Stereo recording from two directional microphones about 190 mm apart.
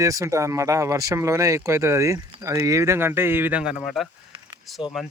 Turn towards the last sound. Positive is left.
turn(degrees=0)  # may be behind; listen again after turning